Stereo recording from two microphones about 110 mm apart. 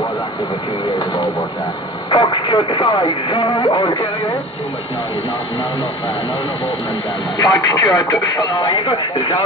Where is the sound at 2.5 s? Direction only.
50° left (ahead or behind).